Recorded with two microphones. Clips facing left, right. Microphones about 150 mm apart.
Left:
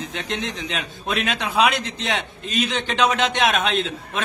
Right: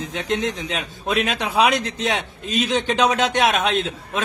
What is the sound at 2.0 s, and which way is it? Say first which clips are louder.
A man's voice: right 2 dB; 10° right (ahead or behind).